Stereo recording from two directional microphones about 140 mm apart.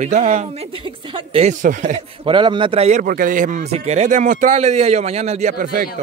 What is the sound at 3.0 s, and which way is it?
Speech, 80° right.